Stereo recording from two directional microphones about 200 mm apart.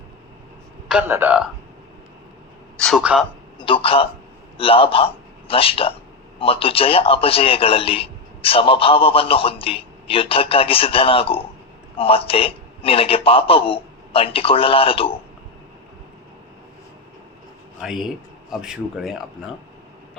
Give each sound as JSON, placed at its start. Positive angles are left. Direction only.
{"t": 0.9, "sound": "a man's voice", "side_deg": -10}
{"t": 2.7, "sound": "a man's voice", "side_deg": 5}
{"t": 3.6, "sound": "a man's voice", "side_deg": 25}
{"t": 17.7, "sound": "a man's voice", "side_deg": 0}